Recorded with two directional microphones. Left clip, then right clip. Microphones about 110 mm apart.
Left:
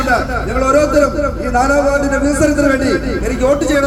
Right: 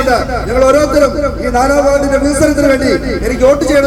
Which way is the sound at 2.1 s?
15° right (ahead or behind).